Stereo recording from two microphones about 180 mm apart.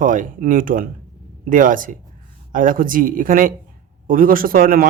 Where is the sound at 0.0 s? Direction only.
50° right (ahead or behind).